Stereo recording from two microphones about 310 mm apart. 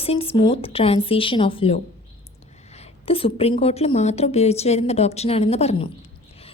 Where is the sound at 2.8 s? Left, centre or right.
Centre.